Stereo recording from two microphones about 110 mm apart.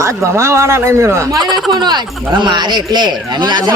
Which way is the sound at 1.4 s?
Centre (ahead or behind).